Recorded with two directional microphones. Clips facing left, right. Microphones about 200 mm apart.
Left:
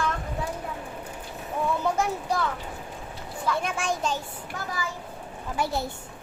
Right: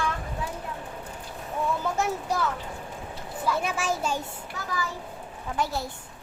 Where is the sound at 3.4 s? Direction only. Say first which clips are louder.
Even; 5° right (ahead or behind).